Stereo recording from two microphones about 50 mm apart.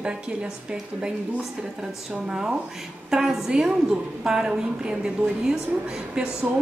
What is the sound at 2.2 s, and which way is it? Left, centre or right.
A woman's voice, centre.